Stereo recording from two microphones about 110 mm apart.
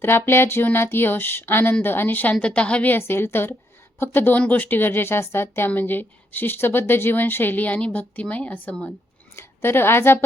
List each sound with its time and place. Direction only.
0.0 s a woman's voice: 20° left (ahead or behind)